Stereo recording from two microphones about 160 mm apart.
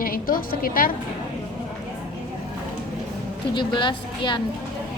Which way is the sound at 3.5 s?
30° left (ahead or behind).